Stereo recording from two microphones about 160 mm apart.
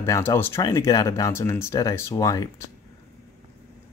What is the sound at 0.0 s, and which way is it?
Speech, 15° left (ahead or behind).